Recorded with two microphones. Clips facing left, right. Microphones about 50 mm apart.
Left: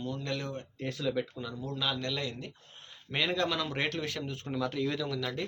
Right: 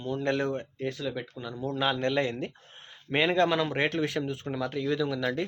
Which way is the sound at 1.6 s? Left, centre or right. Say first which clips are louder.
Right 7 dB; right.